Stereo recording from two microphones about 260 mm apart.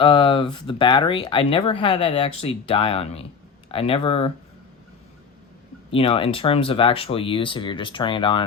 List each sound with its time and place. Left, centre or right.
0.0 s speech: centre
5.9 s speech: left